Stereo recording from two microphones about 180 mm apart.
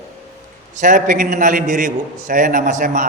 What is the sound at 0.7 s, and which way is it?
A man's voice, 45° right (ahead or behind).